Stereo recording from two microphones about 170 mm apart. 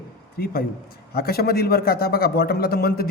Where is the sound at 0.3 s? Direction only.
65° left (ahead or behind).